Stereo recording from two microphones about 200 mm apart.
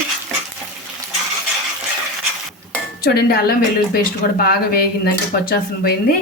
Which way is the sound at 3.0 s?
50° left (ahead or behind).